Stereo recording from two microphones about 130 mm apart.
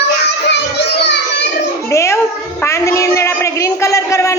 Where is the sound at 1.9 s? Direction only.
20° left (ahead or behind).